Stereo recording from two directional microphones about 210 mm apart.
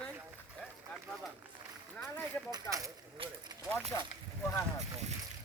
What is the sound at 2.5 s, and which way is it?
Speech, 15° right (ahead or behind).